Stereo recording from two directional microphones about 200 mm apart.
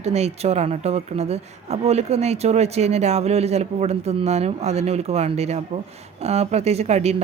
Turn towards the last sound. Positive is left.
turn(degrees=-30)  # may be behind; listen again after turning